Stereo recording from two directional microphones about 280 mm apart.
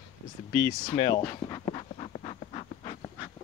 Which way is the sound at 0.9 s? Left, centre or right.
Centre.